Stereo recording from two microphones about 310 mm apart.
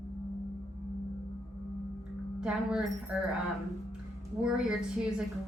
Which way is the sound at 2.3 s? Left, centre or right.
Centre.